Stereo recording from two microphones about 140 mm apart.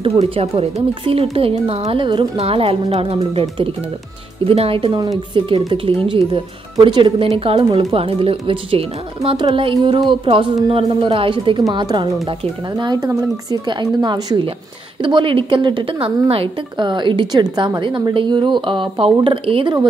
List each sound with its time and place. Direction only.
0.0 s speech: 45° right (ahead or behind)
4.5 s a woman's voice: 45° right (ahead or behind)
9.8 s speech: 25° right (ahead or behind)
10.0 s a woman's voice: 40° right (ahead or behind)